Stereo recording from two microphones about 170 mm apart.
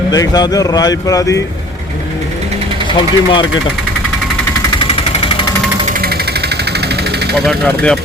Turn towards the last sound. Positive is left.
turn(degrees=5)  # may be behind; listen again after turning